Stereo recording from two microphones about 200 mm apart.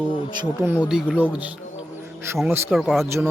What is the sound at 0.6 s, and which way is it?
Speech, 5° right (ahead or behind).